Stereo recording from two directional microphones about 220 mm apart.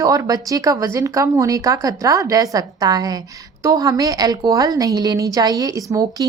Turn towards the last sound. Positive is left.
turn(degrees=-15)  # may be behind; listen again after turning